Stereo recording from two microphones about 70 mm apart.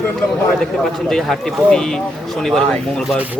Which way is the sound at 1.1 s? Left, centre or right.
Centre.